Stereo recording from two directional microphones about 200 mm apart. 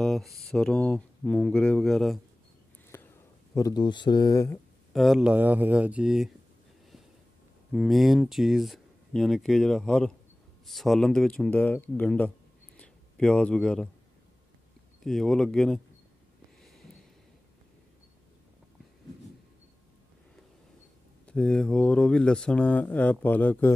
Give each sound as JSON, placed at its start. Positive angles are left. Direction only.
{"t": 0.0, "sound": "speech", "side_deg": 0}
{"t": 2.9, "sound": "a sound", "side_deg": 10}
{"t": 3.5, "sound": "speech", "side_deg": 20}
{"t": 4.9, "sound": "speech", "side_deg": 0}
{"t": 7.7, "sound": "speech", "side_deg": 0}
{"t": 12.7, "sound": "a sound", "side_deg": 5}
{"t": 15.0, "sound": "speech", "side_deg": 0}
{"t": 16.6, "sound": "a sound", "side_deg": 0}
{"t": 21.3, "sound": "speech", "side_deg": 5}